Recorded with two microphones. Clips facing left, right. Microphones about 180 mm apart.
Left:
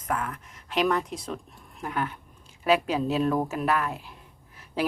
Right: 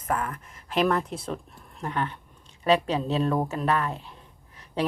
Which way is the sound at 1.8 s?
5° left (ahead or behind).